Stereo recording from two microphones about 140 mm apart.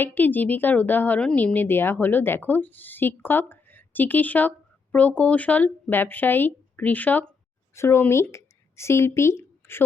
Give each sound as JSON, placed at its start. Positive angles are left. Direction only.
{"t": 0.0, "sound": "speech", "side_deg": 15}